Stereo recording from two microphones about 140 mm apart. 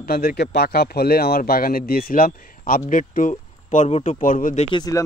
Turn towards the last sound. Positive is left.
turn(degrees=35)  # may be behind; listen again after turning